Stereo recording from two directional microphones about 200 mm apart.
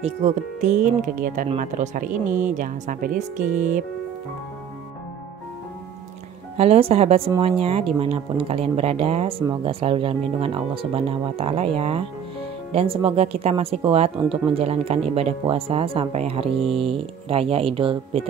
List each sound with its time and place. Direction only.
0.0 s speech: 35° right (ahead or behind)
6.5 s speech: 30° right (ahead or behind)